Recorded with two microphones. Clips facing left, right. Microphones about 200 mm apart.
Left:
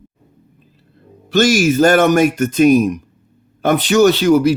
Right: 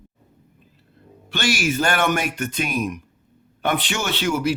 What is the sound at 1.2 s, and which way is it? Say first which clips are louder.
Speech: left 10 dB; 40° left (ahead or behind).